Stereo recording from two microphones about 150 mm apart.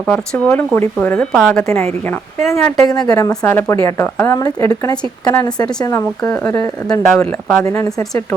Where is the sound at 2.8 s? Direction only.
25° left (ahead or behind).